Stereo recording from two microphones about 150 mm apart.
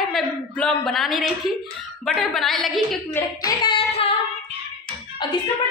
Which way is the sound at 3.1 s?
25° left (ahead or behind).